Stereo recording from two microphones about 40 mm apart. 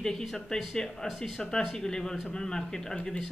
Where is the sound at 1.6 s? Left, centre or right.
Centre.